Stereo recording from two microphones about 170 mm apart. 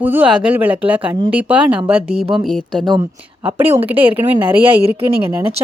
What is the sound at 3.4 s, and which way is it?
Speech, 10° right (ahead or behind).